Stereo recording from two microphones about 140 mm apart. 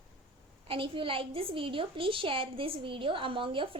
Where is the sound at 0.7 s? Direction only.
40° right (ahead or behind).